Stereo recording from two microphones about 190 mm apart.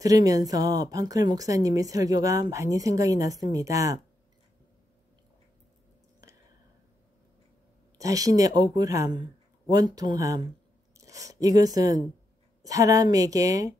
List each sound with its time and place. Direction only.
0.0 s a woman's voice: 20° right (ahead or behind)
8.0 s a woman's voice: 20° right (ahead or behind)